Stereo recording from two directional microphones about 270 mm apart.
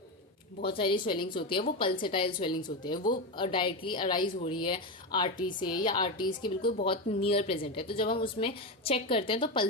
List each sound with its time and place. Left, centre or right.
0.6 s a woman's voice: centre